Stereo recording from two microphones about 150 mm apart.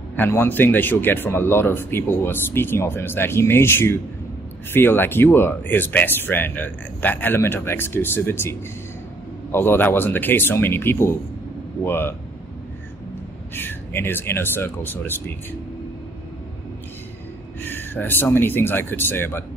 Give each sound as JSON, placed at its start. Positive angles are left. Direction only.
{"t": 0.1, "sound": "speech", "side_deg": 15}
{"t": 13.6, "sound": "speech", "side_deg": 15}
{"t": 17.6, "sound": "speech", "side_deg": 15}